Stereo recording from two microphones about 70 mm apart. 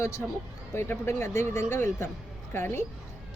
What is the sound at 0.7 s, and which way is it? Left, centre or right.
Speech, left.